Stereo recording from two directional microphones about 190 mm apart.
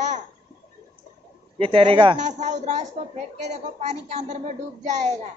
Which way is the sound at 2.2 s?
40° right (ahead or behind).